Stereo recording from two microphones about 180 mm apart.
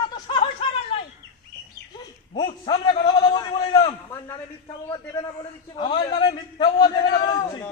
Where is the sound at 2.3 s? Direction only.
25° left (ahead or behind).